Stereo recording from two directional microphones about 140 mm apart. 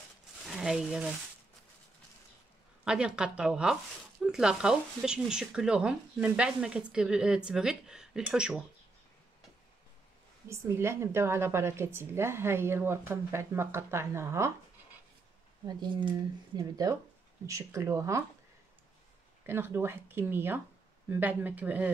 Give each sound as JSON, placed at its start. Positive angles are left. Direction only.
{"t": 0.5, "sound": "speech", "side_deg": -5}
{"t": 2.8, "sound": "speech", "side_deg": -5}
{"t": 10.5, "sound": "speech", "side_deg": -20}
{"t": 15.6, "sound": "speech", "side_deg": -30}
{"t": 19.4, "sound": "speech", "side_deg": -15}